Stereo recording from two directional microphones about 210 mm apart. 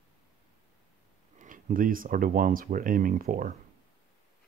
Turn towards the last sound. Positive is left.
turn(degrees=-40)  # may be behind; listen again after turning